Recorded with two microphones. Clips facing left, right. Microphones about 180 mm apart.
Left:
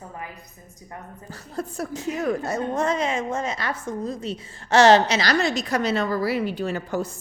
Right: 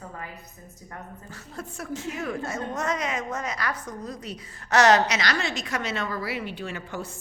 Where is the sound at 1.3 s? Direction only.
35° left (ahead or behind).